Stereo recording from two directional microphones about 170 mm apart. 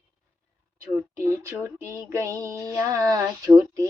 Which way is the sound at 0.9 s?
15° right (ahead or behind).